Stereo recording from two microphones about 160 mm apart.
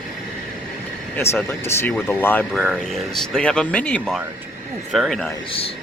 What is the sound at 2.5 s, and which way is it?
Speech, centre (ahead or behind).